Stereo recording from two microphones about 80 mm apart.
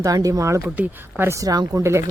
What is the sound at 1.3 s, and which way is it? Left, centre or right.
Speech, right.